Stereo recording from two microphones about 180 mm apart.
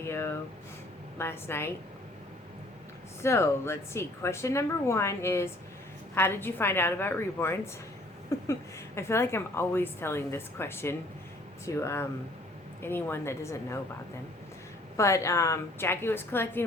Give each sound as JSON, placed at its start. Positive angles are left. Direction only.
{"t": 0.0, "sound": "speech", "side_deg": 15}
{"t": 3.2, "sound": "speech", "side_deg": 15}
{"t": 14.9, "sound": "speech", "side_deg": 15}